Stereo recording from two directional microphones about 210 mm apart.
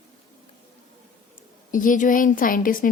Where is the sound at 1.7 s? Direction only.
40° left (ahead or behind).